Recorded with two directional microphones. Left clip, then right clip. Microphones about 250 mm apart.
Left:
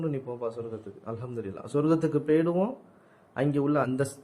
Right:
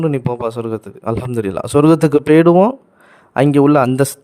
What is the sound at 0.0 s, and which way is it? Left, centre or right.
Speech, right.